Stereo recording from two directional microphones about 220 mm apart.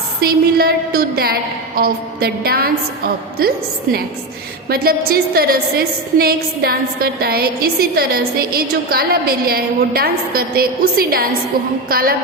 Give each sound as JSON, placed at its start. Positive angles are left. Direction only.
{"t": 0.2, "sound": "a woman's voice", "side_deg": -45}
{"t": 4.7, "sound": "a woman's voice", "side_deg": -45}